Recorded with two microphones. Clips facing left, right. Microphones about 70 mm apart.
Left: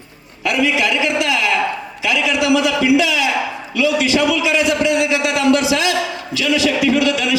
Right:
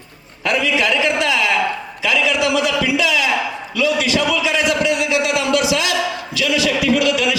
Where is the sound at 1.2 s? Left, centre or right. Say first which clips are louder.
Even; left.